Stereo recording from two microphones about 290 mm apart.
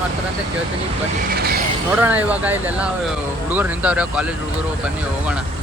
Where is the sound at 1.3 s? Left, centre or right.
Right.